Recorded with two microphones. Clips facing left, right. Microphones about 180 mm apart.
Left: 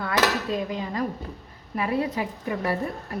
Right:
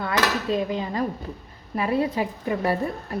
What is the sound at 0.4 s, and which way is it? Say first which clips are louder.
A woman's voice: right 3 dB; 25° right (ahead or behind).